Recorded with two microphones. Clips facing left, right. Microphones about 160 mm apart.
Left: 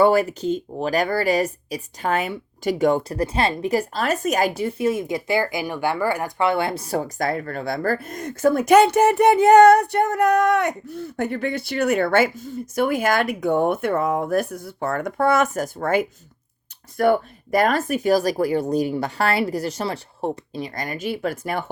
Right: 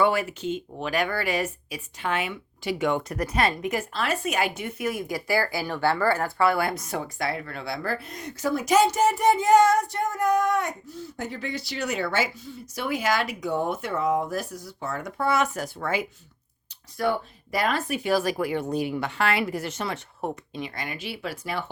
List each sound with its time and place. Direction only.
0.0 s speech: 40° left (ahead or behind)